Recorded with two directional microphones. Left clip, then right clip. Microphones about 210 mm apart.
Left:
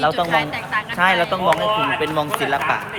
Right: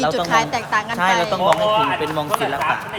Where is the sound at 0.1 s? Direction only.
15° right (ahead or behind).